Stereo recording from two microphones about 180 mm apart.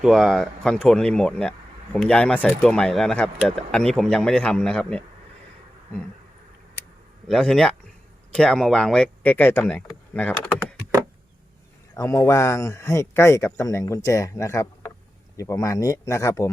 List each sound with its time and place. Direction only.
0.0 s speech: centre (ahead or behind)
7.3 s speech: 5° left (ahead or behind)
11.9 s speech: 15° left (ahead or behind)